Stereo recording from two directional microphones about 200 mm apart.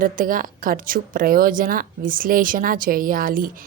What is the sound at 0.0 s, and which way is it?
A woman's voice, 45° right (ahead or behind).